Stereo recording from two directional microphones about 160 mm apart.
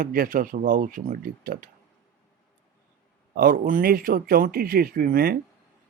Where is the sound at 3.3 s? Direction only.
60° right (ahead or behind).